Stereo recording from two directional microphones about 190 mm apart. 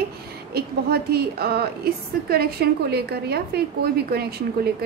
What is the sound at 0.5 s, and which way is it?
A woman's voice, 55° right (ahead or behind).